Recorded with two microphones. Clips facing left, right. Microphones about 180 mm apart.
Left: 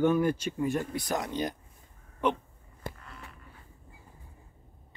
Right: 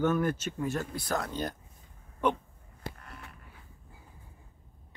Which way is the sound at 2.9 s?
60° right (ahead or behind).